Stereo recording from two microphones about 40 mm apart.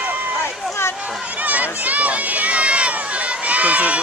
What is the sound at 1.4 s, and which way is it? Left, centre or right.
Run, right.